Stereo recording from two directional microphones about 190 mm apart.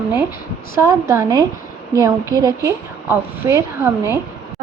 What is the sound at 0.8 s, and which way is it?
A woman's voice, 15° right (ahead or behind).